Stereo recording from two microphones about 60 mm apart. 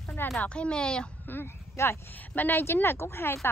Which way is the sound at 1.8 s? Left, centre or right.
Left.